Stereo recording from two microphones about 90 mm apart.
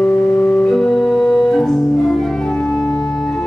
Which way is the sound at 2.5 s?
15° left (ahead or behind).